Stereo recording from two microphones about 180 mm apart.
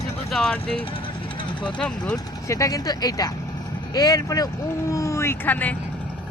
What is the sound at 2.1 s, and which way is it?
Speech, 20° left (ahead or behind).